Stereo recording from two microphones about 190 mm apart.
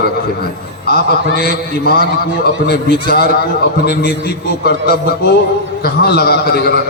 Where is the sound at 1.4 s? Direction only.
50° left (ahead or behind).